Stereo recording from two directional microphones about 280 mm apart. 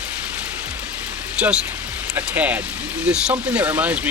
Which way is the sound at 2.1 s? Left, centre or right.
Centre.